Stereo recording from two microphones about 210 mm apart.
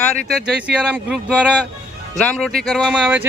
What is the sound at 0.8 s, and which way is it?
A man's voice, 5° right (ahead or behind).